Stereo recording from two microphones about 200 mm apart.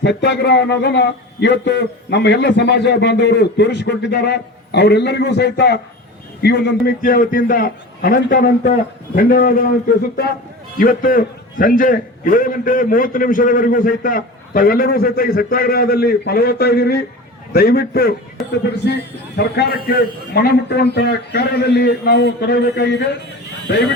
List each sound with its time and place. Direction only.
0.0 s a man's voice: 60° left (ahead or behind)
7.0 s a man's voice: 45° left (ahead or behind)
10.8 s a man's voice: 45° left (ahead or behind)
19.4 s a man's voice: 55° left (ahead or behind)